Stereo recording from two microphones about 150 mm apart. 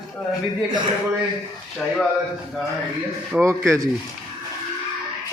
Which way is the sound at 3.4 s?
20° right (ahead or behind).